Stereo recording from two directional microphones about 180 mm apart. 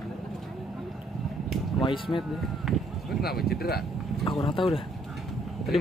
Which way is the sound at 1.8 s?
30° left (ahead or behind).